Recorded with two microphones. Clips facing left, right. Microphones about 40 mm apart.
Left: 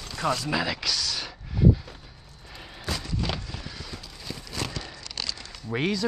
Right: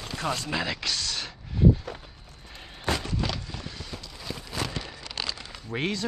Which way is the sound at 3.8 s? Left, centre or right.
Centre.